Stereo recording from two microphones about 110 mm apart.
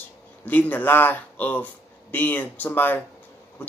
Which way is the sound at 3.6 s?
15° left (ahead or behind).